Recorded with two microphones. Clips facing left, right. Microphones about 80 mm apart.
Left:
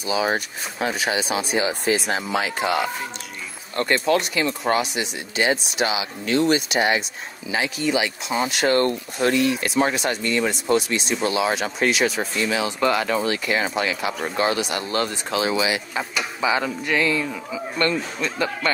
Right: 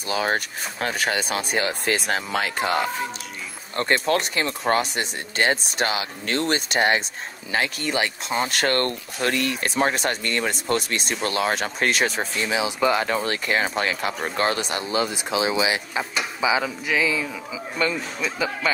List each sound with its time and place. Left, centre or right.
0.1 s speech: right
3.7 s speech: right
4.1 s speech: right
12.4 s speech: centre
13.3 s speech: right
14.9 s a man's voice: centre